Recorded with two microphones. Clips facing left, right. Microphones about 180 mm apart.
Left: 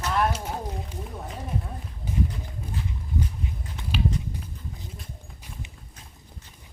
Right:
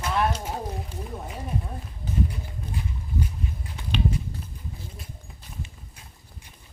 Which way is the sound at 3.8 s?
5° left (ahead or behind).